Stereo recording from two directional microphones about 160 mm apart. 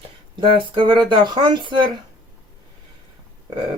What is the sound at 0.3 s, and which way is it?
Speech, 30° right (ahead or behind).